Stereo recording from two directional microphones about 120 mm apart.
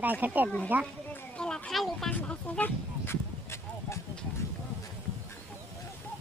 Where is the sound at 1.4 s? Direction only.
5° left (ahead or behind).